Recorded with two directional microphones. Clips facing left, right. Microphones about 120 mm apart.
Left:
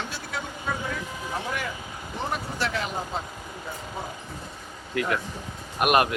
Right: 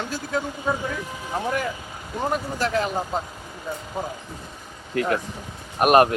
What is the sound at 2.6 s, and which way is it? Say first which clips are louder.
Speech: right 6 dB; 40° right (ahead or behind).